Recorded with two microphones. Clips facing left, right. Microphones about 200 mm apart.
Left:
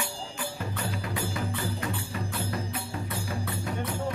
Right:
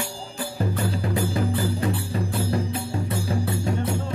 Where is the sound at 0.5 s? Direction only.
35° right (ahead or behind).